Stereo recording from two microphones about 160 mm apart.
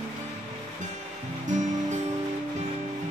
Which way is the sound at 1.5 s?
50° right (ahead or behind).